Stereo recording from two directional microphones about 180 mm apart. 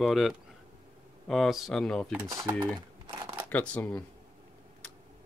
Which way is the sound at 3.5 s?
5° left (ahead or behind).